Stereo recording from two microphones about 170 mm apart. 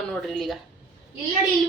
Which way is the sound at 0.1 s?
Centre (ahead or behind).